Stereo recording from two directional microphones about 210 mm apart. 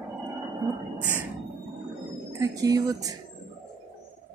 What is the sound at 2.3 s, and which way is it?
Speech, 15° right (ahead or behind).